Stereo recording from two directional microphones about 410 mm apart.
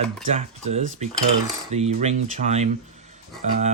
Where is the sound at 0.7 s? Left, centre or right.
Centre.